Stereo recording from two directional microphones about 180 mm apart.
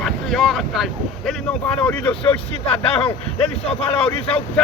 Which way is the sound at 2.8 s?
35° left (ahead or behind).